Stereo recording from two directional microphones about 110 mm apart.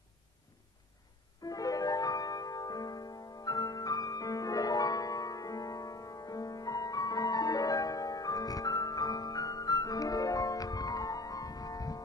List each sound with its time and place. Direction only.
1.4 s music: 35° left (ahead or behind)